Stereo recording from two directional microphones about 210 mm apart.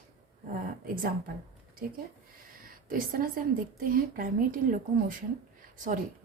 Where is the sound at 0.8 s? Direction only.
40° right (ahead or behind).